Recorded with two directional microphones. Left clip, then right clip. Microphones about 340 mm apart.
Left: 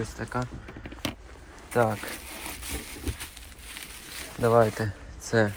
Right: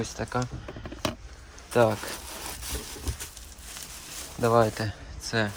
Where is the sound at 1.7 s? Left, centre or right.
Centre.